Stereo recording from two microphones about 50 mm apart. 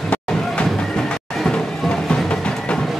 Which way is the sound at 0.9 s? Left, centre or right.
Centre.